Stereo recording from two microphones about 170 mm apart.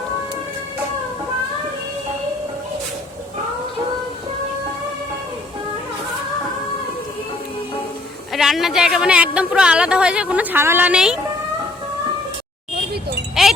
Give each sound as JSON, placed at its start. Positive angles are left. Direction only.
{"t": 8.3, "sound": "speech", "side_deg": 0}
{"t": 13.4, "sound": "wind chime", "side_deg": 0}